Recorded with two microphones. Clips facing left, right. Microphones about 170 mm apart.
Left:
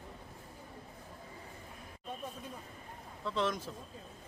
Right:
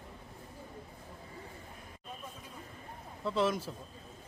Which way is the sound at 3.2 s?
5° right (ahead or behind).